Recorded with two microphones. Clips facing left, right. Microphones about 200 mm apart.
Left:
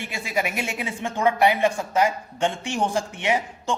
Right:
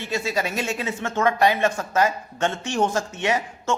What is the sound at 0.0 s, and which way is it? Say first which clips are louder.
Speech: right 2 dB; 15° left (ahead or behind).